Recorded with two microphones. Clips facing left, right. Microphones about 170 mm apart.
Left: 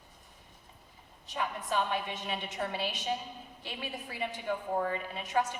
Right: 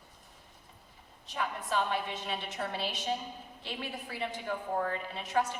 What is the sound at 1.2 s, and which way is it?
A woman's voice, 15° left (ahead or behind).